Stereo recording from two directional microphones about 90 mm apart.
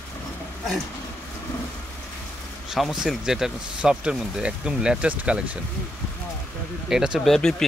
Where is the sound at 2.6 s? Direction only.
5° right (ahead or behind).